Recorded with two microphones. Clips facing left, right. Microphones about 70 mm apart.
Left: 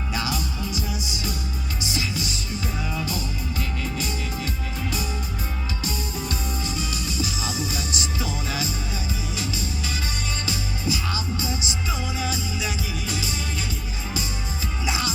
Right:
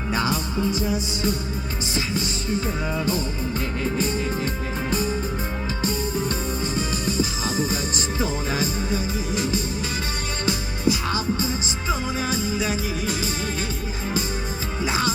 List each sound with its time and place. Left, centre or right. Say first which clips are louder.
0.1 s music: right 5 dB; right
3.8 s music: right 6 dB; right
14.8 s music: right 3 dB; right